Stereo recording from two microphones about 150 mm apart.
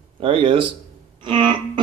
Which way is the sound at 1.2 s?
30° right (ahead or behind).